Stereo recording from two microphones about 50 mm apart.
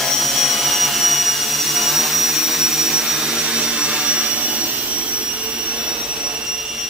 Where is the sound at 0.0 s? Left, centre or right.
Centre; by 6.3 s right.